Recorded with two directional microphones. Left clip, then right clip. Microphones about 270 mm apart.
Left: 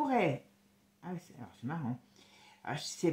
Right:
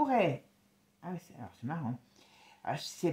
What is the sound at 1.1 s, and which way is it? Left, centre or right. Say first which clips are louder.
Speech: right 1 dB; right.